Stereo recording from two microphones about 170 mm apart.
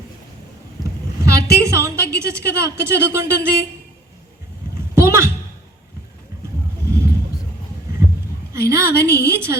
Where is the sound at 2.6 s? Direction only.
15° right (ahead or behind).